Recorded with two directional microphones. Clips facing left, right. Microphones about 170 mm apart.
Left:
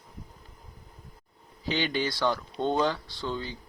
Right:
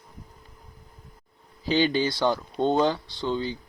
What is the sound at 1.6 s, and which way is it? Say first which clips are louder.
Speech: right 6 dB; 30° right (ahead or behind).